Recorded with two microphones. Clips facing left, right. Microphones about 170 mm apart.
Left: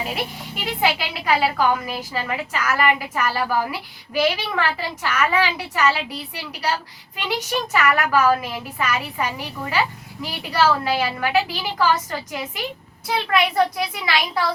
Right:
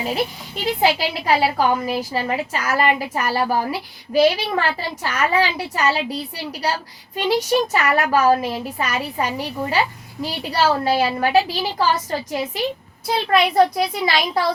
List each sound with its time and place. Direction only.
0.6 s a woman's voice: 35° right (ahead or behind)